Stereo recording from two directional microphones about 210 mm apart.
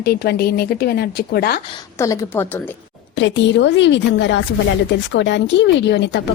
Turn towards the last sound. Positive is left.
turn(degrees=55)  # may be behind; listen again after turning